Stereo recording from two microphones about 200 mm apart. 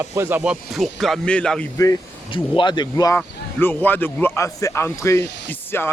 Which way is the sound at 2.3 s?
25° left (ahead or behind).